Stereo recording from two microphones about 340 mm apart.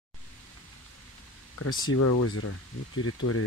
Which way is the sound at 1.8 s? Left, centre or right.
Left.